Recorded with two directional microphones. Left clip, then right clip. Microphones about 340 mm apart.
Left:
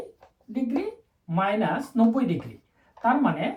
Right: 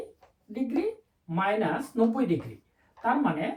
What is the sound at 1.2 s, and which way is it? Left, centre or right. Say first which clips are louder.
Speech: left 2 dB; centre.